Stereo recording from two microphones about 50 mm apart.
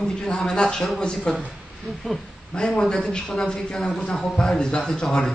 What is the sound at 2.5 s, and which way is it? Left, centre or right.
A man's voice, centre.